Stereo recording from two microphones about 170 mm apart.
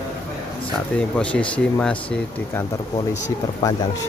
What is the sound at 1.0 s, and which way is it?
Speech, 5° left (ahead or behind).